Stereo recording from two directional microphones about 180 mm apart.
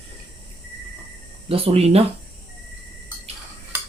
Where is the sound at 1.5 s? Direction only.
30° right (ahead or behind).